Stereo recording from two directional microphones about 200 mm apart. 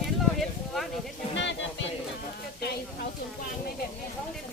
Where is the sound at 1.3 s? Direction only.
65° left (ahead or behind).